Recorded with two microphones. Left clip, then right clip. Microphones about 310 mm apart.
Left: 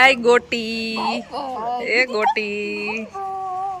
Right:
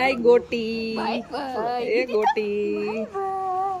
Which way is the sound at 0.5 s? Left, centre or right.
Centre.